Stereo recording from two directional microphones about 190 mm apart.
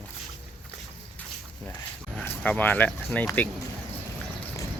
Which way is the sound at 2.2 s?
10° left (ahead or behind).